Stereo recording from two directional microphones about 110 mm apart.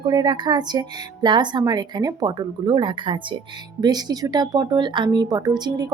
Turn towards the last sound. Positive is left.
turn(degrees=-40)  # may be behind; listen again after turning